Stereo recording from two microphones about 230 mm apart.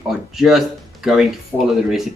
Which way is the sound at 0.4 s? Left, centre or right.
Centre.